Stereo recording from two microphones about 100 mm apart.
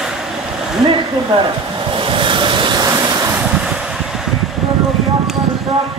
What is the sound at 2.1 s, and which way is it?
Vehicle, 55° right (ahead or behind).